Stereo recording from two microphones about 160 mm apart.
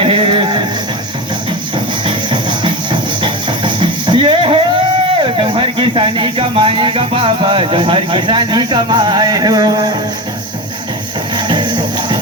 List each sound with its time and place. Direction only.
0.0 s music: 35° right (ahead or behind)
2.0 s music: 30° right (ahead or behind)
5.2 s speech: 30° right (ahead or behind)
11.3 s music: 30° right (ahead or behind)